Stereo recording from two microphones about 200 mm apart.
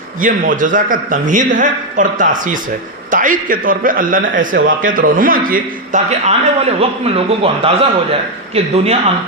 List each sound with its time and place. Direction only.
0.2 s a man's voice: 40° right (ahead or behind)